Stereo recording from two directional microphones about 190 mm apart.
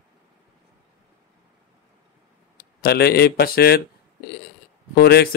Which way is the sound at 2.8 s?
55° left (ahead or behind).